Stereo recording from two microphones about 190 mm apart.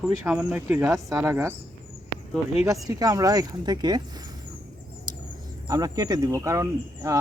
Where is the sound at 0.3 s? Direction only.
5° right (ahead or behind).